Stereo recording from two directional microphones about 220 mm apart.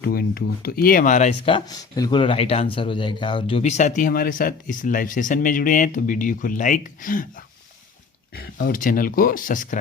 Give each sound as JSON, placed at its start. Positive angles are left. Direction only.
{"t": 0.0, "sound": "speech", "side_deg": 45}
{"t": 1.5, "sound": "speech", "side_deg": 20}
{"t": 8.4, "sound": "speech", "side_deg": 45}